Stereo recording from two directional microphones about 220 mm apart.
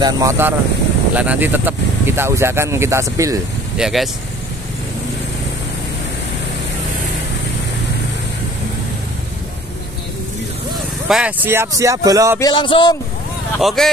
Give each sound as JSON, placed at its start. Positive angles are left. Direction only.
{"t": 0.0, "sound": "speech", "side_deg": -15}
{"t": 3.7, "sound": "speech", "side_deg": 0}
{"t": 11.1, "sound": "speech", "side_deg": -5}
{"t": 12.4, "sound": "a sound", "side_deg": 20}
{"t": 13.6, "sound": "speech", "side_deg": 0}